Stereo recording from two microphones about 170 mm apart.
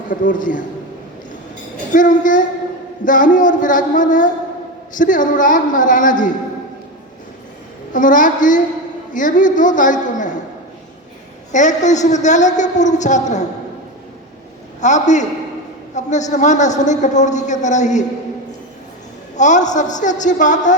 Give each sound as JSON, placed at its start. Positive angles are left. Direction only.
{"t": 0.1, "sound": "a woman's voice", "side_deg": 50}
{"t": 1.9, "sound": "a woman's voice", "side_deg": 50}
{"t": 7.9, "sound": "a woman's voice", "side_deg": 50}
{"t": 11.5, "sound": "a woman's voice", "side_deg": 45}
{"t": 14.8, "sound": "a woman's voice", "side_deg": 45}
{"t": 19.4, "sound": "a woman's voice", "side_deg": 45}